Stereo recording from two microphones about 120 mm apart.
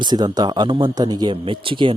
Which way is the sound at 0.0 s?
35° right (ahead or behind).